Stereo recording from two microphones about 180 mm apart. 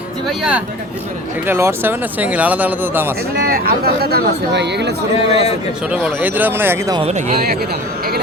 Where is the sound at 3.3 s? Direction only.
55° right (ahead or behind); by 5.0 s 70° right (ahead or behind).